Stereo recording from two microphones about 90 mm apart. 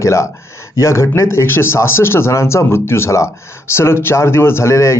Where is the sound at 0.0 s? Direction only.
35° left (ahead or behind).